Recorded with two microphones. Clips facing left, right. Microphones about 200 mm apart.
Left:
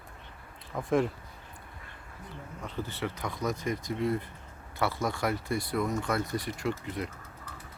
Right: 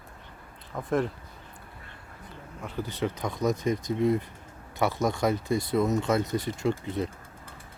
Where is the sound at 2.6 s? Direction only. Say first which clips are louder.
Right 4 dB; 15° right (ahead or behind).